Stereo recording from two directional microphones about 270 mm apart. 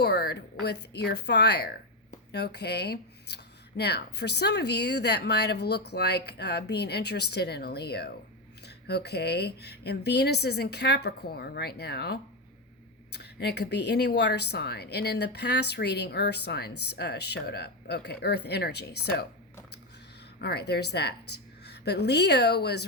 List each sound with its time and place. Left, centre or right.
0.0 s speech: left
20.4 s speech: left